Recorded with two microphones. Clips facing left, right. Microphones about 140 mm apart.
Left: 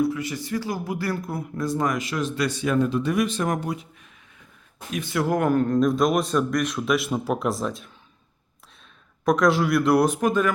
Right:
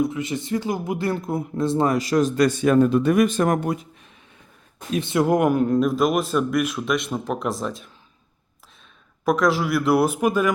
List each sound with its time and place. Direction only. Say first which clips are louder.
0.0 s speech: right 1 dB; 20° right (ahead or behind); by 3.8 s 50° right (ahead or behind)
4.9 s speech: right 5 dB; 25° right (ahead or behind); by 7.9 s centre (ahead or behind)
9.2 s speech: even; centre (ahead or behind)